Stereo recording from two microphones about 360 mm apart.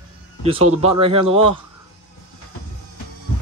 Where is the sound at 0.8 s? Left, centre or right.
Centre.